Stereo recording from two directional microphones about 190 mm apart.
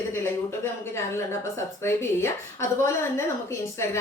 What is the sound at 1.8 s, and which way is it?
Speech, 15° left (ahead or behind).